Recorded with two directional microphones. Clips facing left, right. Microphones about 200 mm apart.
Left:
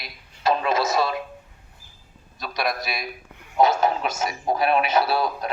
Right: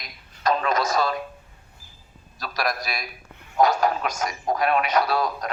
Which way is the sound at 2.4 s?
Centre (ahead or behind).